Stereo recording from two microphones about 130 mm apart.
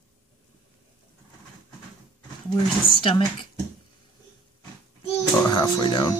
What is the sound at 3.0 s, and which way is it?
Speech, 40° left (ahead or behind).